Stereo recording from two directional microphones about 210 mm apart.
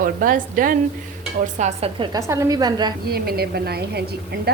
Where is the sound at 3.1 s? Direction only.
50° right (ahead or behind).